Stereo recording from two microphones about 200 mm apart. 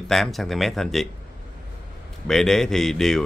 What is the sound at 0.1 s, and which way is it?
Speech, centre (ahead or behind).